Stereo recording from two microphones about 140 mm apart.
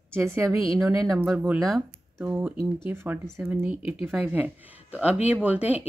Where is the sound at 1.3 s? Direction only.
10° right (ahead or behind).